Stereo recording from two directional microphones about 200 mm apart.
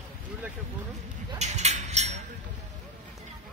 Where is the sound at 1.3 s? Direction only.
35° right (ahead or behind).